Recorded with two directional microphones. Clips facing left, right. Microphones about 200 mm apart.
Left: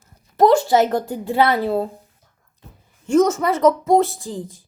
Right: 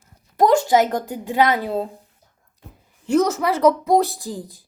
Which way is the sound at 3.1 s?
10° right (ahead or behind).